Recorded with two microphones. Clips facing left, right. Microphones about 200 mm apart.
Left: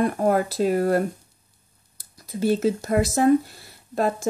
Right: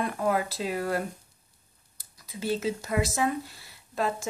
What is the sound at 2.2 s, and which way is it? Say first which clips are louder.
Speech: left 8 dB; 45° left (ahead or behind).